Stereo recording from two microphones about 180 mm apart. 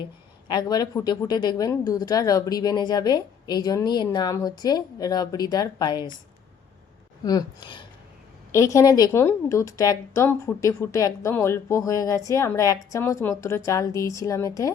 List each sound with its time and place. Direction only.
0.4 s speech: 20° left (ahead or behind)
7.3 s a woman's voice: 25° left (ahead or behind)